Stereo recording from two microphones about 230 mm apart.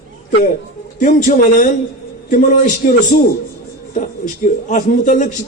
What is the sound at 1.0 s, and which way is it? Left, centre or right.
A man's voice, left.